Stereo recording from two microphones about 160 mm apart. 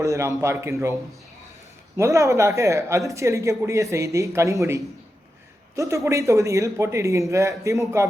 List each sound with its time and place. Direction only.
0.0 s a man's voice: 20° right (ahead or behind)
2.0 s a man's voice: 20° right (ahead or behind)